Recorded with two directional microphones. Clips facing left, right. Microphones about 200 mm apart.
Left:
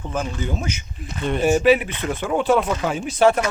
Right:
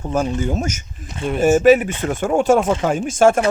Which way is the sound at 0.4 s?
45° right (ahead or behind).